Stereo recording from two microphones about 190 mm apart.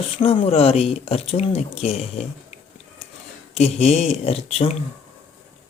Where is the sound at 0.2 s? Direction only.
30° left (ahead or behind).